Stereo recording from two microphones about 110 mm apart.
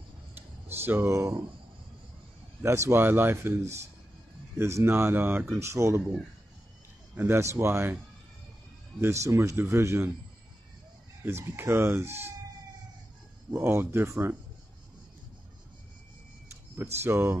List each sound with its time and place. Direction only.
0.8 s speech: 25° right (ahead or behind)
2.6 s speech: 25° right (ahead or behind)
4.6 s speech: 25° right (ahead or behind)
7.2 s speech: 20° right (ahead or behind)
9.0 s speech: 25° right (ahead or behind)
11.2 s speech: 20° right (ahead or behind)
13.5 s speech: 20° right (ahead or behind)
17.0 s speech: 20° right (ahead or behind)